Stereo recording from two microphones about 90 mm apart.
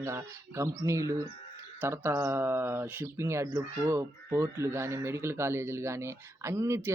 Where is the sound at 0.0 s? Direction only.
30° right (ahead or behind).